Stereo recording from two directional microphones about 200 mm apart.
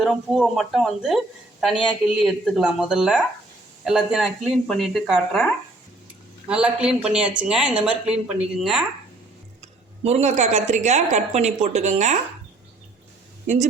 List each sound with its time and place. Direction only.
0.0 s speech: centre (ahead or behind)
9.6 s a woman's voice: 30° right (ahead or behind)